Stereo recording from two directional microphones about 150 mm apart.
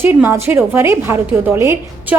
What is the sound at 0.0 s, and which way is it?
A woman's voice, 15° right (ahead or behind).